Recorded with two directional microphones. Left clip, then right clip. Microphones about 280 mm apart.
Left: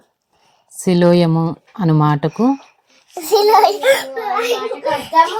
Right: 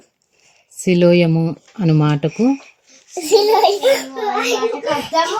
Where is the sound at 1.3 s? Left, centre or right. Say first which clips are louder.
Left 1 dB; left.